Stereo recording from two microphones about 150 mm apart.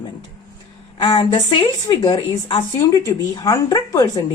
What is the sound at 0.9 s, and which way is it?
A woman's voice, 30° left (ahead or behind).